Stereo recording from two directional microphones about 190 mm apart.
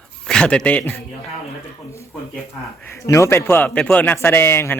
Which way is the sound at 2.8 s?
15° left (ahead or behind).